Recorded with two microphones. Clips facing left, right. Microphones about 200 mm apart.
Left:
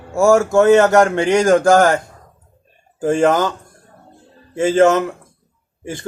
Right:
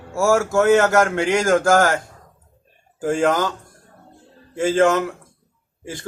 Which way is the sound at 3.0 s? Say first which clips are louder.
Left 4 dB; 15° left (ahead or behind).